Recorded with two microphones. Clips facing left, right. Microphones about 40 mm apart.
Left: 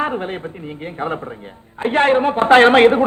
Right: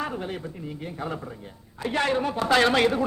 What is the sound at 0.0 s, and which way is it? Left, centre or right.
A man's voice, left.